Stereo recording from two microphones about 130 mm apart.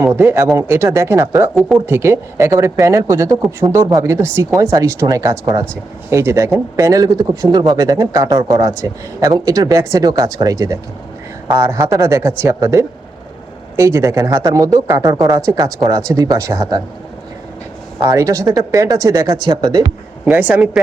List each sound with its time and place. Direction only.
0.0 s speech: 15° right (ahead or behind)
18.0 s speech: 25° right (ahead or behind)
20.2 s speech: 10° right (ahead or behind)